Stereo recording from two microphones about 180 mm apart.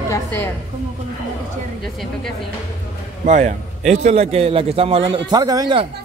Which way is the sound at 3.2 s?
40° right (ahead or behind).